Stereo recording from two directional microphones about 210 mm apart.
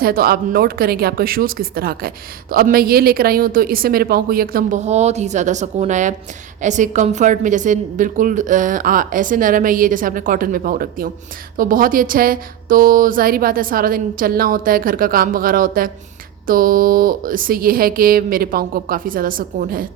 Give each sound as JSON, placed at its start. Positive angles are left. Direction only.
{"t": 0.0, "sound": "a woman's voice", "side_deg": -45}